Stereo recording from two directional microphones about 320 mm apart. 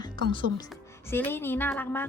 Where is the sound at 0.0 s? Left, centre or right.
Centre.